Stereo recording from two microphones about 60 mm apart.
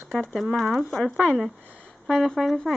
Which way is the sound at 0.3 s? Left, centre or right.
Centre.